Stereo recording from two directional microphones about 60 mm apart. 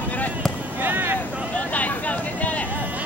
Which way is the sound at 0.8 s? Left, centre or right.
Right.